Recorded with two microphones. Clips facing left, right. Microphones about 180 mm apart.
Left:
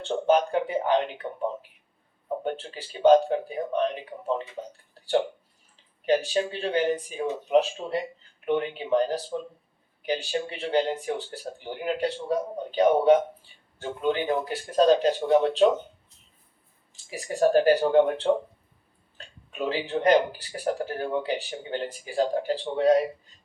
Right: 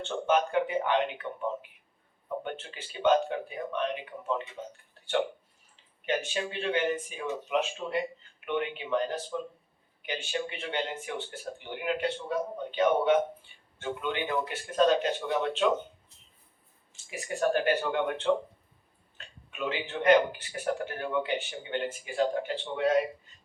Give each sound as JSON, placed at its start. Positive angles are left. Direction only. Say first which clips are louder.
{"t": 0.0, "sound": "speech", "louder": "left 5 dB", "side_deg": 35}
{"t": 6.1, "sound": "speech", "louder": "left 7 dB", "side_deg": 35}
{"t": 17.1, "sound": "speech", "louder": "left 6 dB", "side_deg": 35}